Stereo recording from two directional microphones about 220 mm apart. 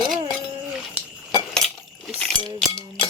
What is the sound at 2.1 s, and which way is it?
Speech, 5° left (ahead or behind).